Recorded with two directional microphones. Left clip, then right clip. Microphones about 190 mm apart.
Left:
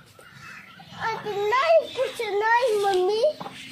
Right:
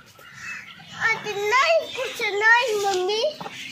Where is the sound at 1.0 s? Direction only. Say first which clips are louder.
Right 3 dB; 15° left (ahead or behind).